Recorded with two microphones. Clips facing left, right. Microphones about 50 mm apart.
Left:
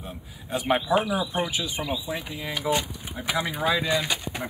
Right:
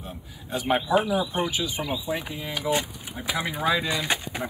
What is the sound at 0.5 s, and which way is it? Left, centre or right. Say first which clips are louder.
Speech: even; centre.